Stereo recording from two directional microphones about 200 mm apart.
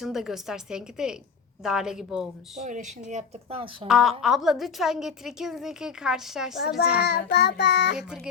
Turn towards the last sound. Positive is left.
turn(degrees=55)  # may be behind; listen again after turning